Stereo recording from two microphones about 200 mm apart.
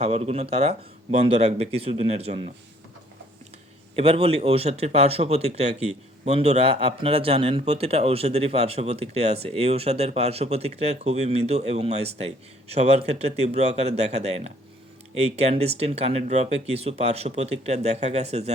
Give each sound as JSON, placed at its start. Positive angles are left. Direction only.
{"t": 0.0, "sound": "speech", "side_deg": -30}
{"t": 3.9, "sound": "speech", "side_deg": -30}